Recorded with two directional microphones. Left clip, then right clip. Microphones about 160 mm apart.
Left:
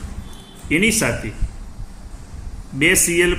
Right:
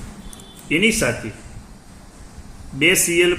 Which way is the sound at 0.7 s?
35° left (ahead or behind).